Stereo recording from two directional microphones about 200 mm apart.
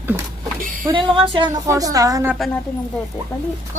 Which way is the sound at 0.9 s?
25° right (ahead or behind).